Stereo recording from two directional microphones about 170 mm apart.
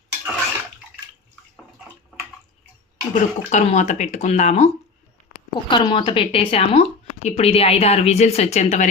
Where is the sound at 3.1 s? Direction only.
45° left (ahead or behind).